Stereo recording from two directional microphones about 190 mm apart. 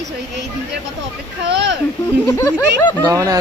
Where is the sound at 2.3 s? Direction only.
10° left (ahead or behind).